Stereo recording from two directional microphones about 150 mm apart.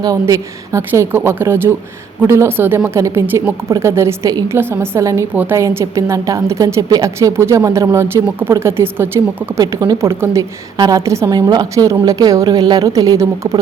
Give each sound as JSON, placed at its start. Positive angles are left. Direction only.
{"t": 0.0, "sound": "a woman's voice", "side_deg": -25}